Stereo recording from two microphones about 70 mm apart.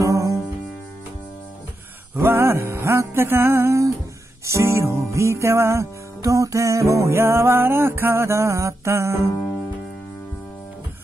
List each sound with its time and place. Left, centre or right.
0.0 s music: right
2.1 s music: right